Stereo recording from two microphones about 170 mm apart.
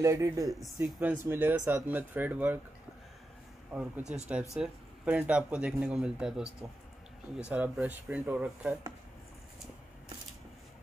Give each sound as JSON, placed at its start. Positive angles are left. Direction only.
{"t": 0.0, "sound": "speech", "side_deg": -20}
{"t": 0.5, "sound": "speech", "side_deg": 0}
{"t": 0.7, "sound": "speech", "side_deg": -10}
{"t": 3.7, "sound": "speech", "side_deg": -5}